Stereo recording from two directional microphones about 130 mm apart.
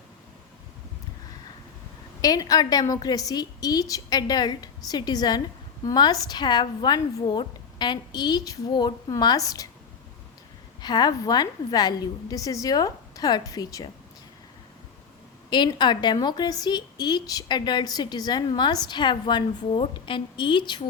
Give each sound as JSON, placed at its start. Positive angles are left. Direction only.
{"t": 2.2, "sound": "a woman's voice", "side_deg": 30}
{"t": 10.8, "sound": "a woman's voice", "side_deg": 30}
{"t": 15.4, "sound": "a woman's voice", "side_deg": 35}